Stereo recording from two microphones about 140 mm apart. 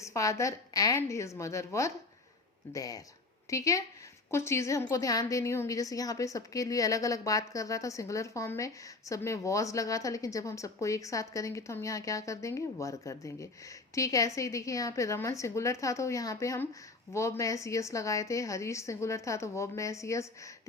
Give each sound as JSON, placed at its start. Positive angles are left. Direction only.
{"t": 0.0, "sound": "a woman's voice", "side_deg": 20}